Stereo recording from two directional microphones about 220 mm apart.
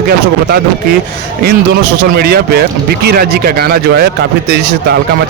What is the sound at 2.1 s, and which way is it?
Speech, 45° right (ahead or behind).